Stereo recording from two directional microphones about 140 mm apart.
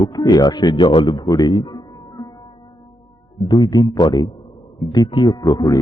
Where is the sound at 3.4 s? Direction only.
30° left (ahead or behind).